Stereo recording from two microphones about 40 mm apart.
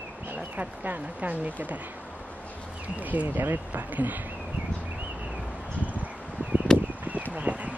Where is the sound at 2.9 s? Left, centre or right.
Right.